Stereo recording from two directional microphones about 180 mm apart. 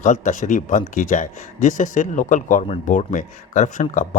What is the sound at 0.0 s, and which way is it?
Speech, 45° left (ahead or behind).